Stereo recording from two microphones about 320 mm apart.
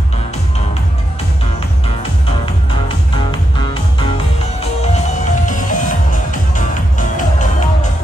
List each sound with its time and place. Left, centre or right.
4.9 s music: left